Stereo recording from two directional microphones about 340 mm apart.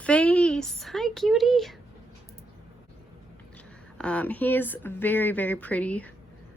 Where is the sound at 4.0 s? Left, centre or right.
Centre.